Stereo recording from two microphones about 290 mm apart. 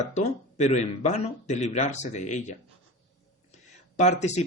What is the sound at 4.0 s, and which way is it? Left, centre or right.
Speech, left.